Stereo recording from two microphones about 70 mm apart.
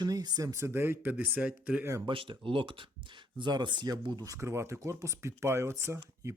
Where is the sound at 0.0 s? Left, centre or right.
Right.